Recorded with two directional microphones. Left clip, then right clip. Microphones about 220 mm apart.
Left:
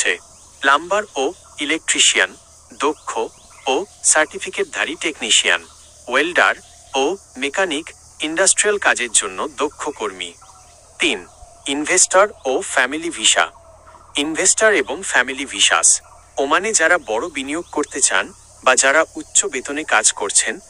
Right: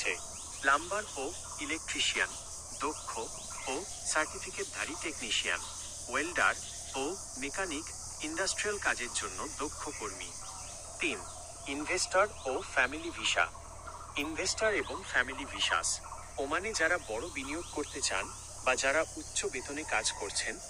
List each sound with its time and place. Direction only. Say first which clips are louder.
0.6 s speech: left 14 dB; 45° left (ahead or behind)